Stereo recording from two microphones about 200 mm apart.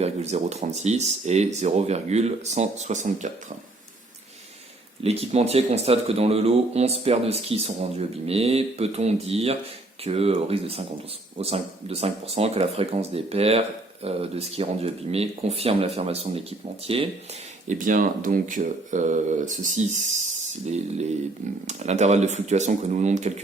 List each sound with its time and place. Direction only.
0.0 s speech: 35° right (ahead or behind)
5.0 s speech: 30° right (ahead or behind)
17.7 s speech: 40° right (ahead or behind)